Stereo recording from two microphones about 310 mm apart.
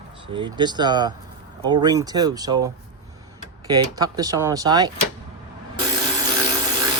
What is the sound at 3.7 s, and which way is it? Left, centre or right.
Speech, centre.